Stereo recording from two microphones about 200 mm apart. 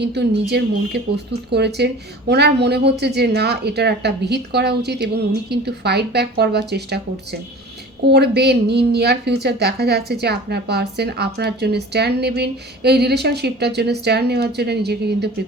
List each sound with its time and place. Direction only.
0.0 s a woman's voice: 55° right (ahead or behind)
8.0 s a woman's voice: 55° right (ahead or behind)